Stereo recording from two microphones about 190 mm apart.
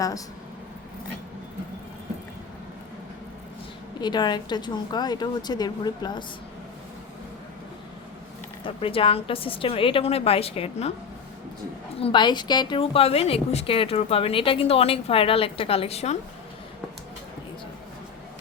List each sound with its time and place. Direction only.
4.0 s a woman's voice: 20° left (ahead or behind)
8.6 s a woman's voice: 30° left (ahead or behind)
11.9 s a woman's voice: 25° left (ahead or behind)